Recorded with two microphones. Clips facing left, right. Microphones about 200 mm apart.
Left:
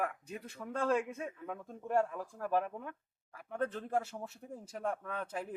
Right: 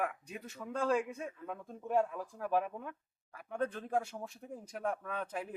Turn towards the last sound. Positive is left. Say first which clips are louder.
# even
turn(degrees=0)  # may be behind; listen again after turning